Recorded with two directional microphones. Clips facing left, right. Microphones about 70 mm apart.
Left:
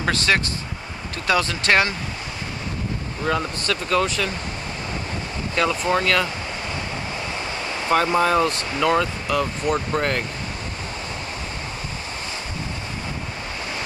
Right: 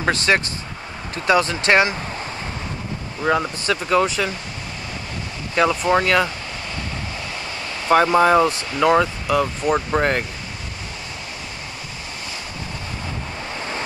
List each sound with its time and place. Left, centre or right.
0.0 s speech: right
3.3 s speech: centre
5.6 s speech: centre
7.9 s speech: centre